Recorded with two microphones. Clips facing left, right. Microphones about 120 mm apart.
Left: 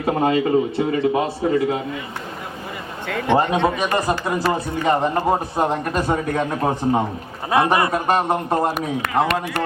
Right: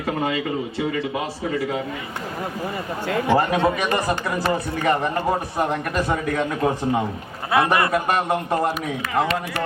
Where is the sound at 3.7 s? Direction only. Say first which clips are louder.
Left 2 dB; 20° left (ahead or behind).